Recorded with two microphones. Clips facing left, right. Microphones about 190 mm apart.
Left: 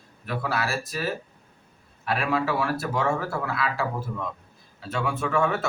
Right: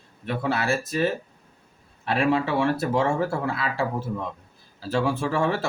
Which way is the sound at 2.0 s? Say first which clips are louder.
Right 3 dB; 30° right (ahead or behind).